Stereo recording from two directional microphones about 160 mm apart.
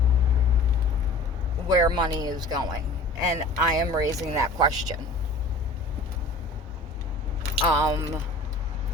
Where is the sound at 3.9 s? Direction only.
20° right (ahead or behind).